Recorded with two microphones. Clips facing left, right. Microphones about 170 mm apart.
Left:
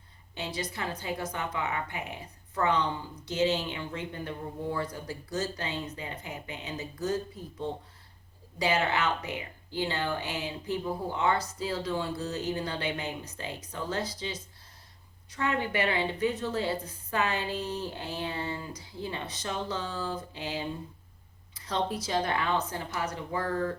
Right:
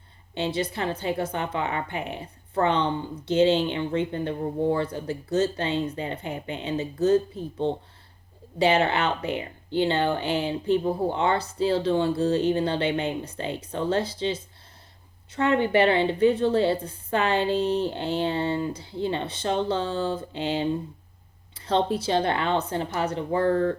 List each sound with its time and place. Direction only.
0.3 s speech: 30° right (ahead or behind)